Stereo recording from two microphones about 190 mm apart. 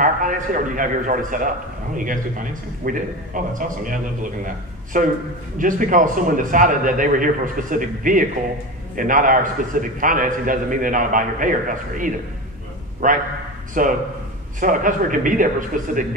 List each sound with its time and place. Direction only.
0.0 s a man's voice: 45° right (ahead or behind)